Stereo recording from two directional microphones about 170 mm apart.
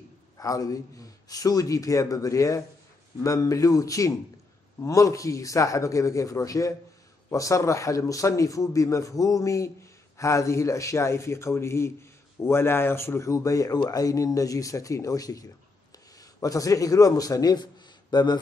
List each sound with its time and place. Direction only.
0.4 s a man's voice: 20° left (ahead or behind)